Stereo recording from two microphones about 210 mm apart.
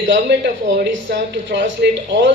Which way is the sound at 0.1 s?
55° right (ahead or behind).